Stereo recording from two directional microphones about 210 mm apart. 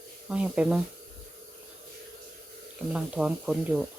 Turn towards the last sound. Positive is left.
turn(degrees=-5)  # may be behind; listen again after turning